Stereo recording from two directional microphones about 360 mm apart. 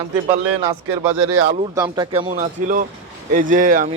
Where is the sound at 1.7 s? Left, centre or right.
Centre.